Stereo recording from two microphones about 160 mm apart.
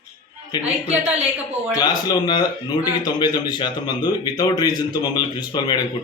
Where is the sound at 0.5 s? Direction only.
25° left (ahead or behind).